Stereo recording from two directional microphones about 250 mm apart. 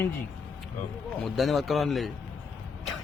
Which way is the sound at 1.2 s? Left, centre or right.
Centre.